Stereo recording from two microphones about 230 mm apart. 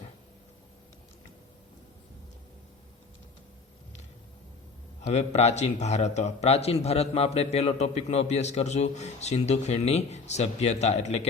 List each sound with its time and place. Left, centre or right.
5.1 s a man's voice: left